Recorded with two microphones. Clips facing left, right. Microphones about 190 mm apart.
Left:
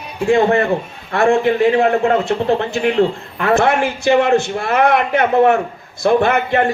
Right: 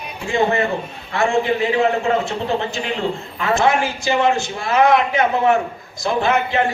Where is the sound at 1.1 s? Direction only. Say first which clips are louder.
Left 4 dB; 55° left (ahead or behind).